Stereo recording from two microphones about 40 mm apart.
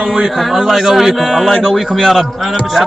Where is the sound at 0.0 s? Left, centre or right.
Centre.